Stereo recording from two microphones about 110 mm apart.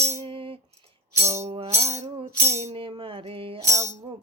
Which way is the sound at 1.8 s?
75° right (ahead or behind).